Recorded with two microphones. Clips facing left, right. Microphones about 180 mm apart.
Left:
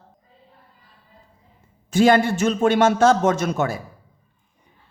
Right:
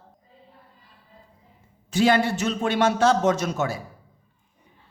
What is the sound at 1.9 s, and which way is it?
A man's voice, 50° left (ahead or behind).